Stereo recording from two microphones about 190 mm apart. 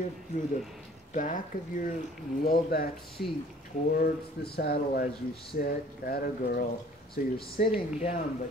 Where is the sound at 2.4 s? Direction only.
50° left (ahead or behind).